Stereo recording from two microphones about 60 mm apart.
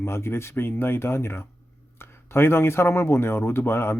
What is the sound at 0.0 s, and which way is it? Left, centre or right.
Speech, left.